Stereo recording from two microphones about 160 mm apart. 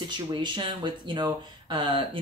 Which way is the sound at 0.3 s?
30° right (ahead or behind).